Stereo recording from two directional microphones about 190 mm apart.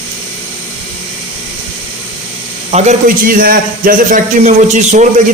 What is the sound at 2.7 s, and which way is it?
A man's voice, 40° right (ahead or behind).